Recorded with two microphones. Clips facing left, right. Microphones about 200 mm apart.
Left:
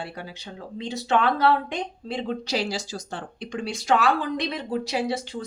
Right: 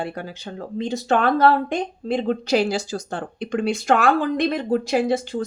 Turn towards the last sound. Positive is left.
turn(degrees=-50)  # may be behind; listen again after turning